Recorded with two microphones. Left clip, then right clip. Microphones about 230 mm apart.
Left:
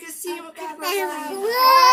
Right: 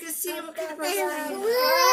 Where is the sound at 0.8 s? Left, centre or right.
Left.